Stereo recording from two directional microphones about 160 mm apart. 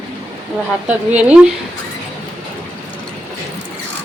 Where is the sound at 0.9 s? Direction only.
10° right (ahead or behind).